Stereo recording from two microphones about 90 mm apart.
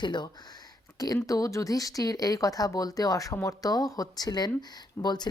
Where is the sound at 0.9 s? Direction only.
45° left (ahead or behind).